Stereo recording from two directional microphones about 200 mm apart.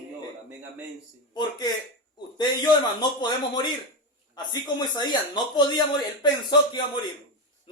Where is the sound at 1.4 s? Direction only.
20° left (ahead or behind).